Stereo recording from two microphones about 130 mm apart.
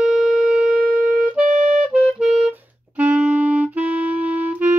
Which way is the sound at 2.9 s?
10° right (ahead or behind).